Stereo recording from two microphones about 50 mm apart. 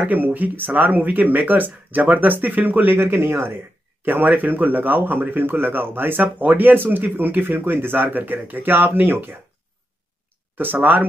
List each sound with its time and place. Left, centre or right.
0.1 s speech: right
4.0 s speech: right
10.6 s speech: right